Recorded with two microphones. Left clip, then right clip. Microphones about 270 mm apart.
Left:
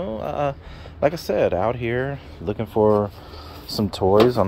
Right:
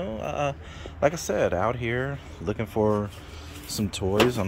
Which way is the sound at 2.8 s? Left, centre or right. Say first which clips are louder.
Left 8 dB; centre.